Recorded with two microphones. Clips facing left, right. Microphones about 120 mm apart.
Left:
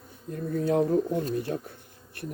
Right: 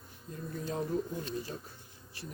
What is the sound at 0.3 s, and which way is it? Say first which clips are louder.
Speech: left 12 dB; 60° left (ahead or behind).